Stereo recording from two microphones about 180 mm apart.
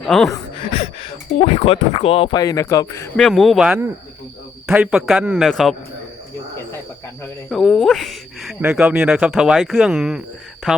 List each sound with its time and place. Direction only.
0.1 s speech: 5° left (ahead or behind)
0.7 s speech: 30° left (ahead or behind)
3.2 s speech: centre (ahead or behind)
7.5 s speech: centre (ahead or behind)